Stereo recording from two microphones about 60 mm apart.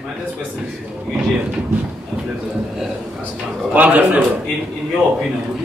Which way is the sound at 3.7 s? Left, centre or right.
Right.